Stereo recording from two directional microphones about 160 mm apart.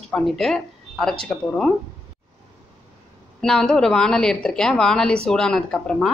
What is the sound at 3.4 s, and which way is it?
A woman's voice, 5° left (ahead or behind).